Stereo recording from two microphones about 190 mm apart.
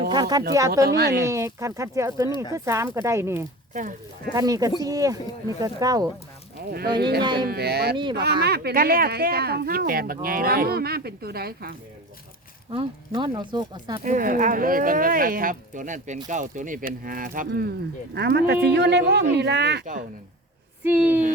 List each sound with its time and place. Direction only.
0.1 s a sound: 20° right (ahead or behind)
0.9 s speech: 55° right (ahead or behind)
1.2 s speech: 15° right (ahead or behind)
6.7 s speech: 55° right (ahead or behind)
7.2 s speech: 25° right (ahead or behind)
7.4 s speech: 55° right (ahead or behind)
12.7 s speech: 25° right (ahead or behind)
14.0 s speech: 45° right (ahead or behind)
17.5 s speech: 60° right (ahead or behind)
19.8 s speech: 45° right (ahead or behind)
20.8 s speech: 10° right (ahead or behind)